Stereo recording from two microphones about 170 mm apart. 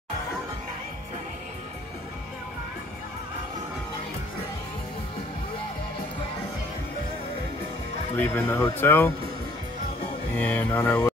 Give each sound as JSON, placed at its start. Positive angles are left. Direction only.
{"t": 8.2, "sound": "speech", "side_deg": 10}
{"t": 10.3, "sound": "speech", "side_deg": 10}